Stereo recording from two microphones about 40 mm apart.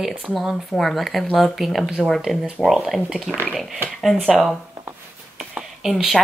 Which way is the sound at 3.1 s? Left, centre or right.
Centre.